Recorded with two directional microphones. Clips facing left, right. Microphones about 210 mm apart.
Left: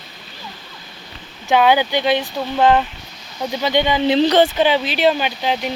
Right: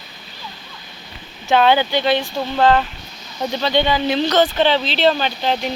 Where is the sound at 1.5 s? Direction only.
10° left (ahead or behind); by 4.4 s 30° left (ahead or behind).